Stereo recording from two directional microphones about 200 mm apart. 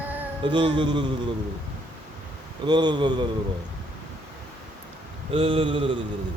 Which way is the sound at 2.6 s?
20° right (ahead or behind).